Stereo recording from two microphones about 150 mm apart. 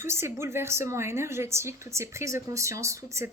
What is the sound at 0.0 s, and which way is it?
A woman's voice, 15° right (ahead or behind).